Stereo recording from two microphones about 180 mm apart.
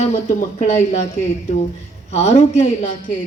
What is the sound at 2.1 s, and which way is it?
Speech, 40° left (ahead or behind).